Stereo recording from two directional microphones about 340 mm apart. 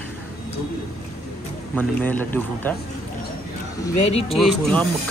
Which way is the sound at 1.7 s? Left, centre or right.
Centre.